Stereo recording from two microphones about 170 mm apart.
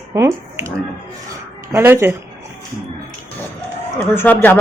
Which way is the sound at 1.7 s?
15° right (ahead or behind).